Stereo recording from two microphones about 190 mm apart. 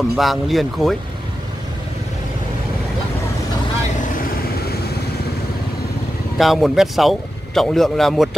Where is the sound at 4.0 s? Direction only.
45° left (ahead or behind).